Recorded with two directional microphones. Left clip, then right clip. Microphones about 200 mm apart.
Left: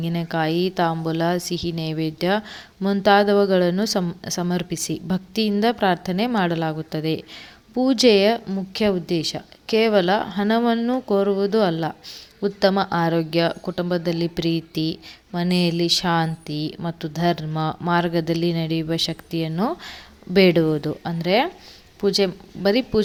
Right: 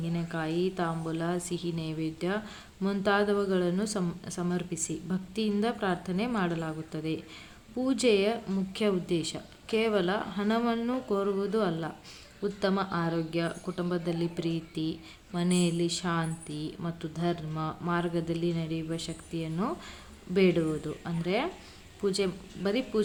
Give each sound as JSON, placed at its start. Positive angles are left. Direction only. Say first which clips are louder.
{"t": 0.0, "sound": "speech", "louder": "left 11 dB", "side_deg": 35}